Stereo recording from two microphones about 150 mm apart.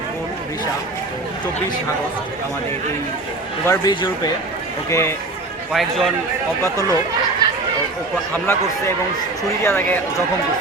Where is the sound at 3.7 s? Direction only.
25° left (ahead or behind).